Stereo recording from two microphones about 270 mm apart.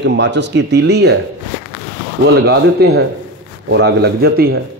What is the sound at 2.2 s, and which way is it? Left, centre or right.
A man's voice, right.